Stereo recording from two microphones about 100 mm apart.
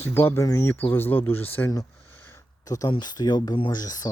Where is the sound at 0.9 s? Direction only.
20° left (ahead or behind).